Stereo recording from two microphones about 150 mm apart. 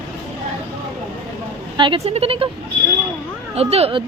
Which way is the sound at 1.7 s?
35° right (ahead or behind).